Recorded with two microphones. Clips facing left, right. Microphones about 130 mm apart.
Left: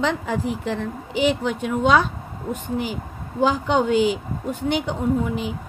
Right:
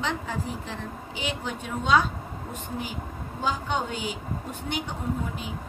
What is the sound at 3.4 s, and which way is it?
A woman's voice, 90° left.